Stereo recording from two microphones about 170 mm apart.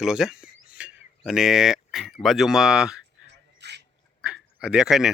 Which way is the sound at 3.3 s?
80° right.